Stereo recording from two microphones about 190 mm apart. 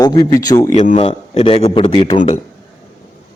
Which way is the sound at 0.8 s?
35° left (ahead or behind).